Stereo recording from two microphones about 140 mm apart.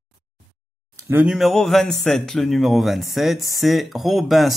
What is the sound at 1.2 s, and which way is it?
Speech, centre (ahead or behind).